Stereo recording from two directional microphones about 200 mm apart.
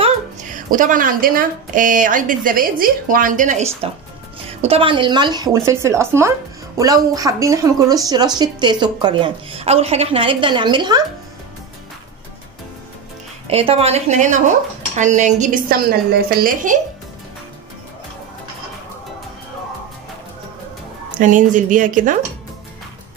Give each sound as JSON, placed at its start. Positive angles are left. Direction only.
{"t": 0.7, "sound": "speech", "side_deg": -40}
{"t": 13.5, "sound": "speech", "side_deg": -30}
{"t": 21.2, "sound": "speech", "side_deg": -40}